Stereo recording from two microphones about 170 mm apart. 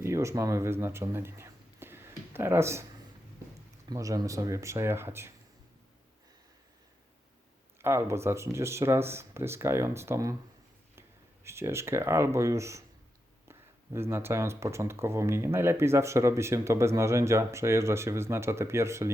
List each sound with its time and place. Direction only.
0.0 s speech: 15° right (ahead or behind)
3.8 s speech: 20° right (ahead or behind)
7.8 s speech: 15° right (ahead or behind)
11.4 s speech: 15° right (ahead or behind)